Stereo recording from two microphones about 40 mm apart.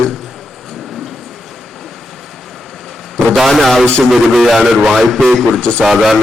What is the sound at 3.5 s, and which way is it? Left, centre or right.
A man's voice, centre.